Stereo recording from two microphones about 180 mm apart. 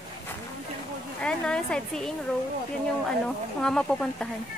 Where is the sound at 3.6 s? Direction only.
5° left (ahead or behind).